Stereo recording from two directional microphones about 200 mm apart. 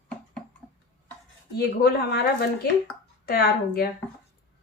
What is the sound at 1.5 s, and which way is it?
A woman's voice, 50° left (ahead or behind).